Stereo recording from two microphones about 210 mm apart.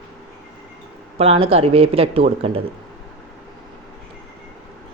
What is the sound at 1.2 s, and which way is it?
Speech, 30° right (ahead or behind).